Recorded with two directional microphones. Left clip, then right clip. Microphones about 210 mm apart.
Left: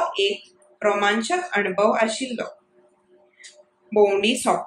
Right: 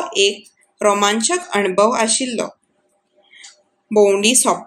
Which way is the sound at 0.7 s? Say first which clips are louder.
Right 5 dB; 55° right (ahead or behind).